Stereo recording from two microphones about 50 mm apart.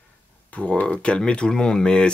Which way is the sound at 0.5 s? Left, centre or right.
Left.